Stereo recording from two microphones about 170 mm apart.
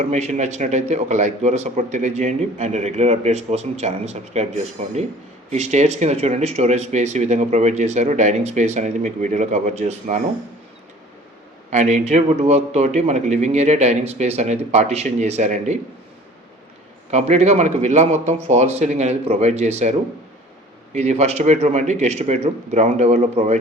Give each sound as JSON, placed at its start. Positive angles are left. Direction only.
{"t": 0.0, "sound": "a man's voice", "side_deg": -40}
{"t": 11.7, "sound": "a man's voice", "side_deg": -40}
{"t": 17.1, "sound": "a man's voice", "side_deg": -40}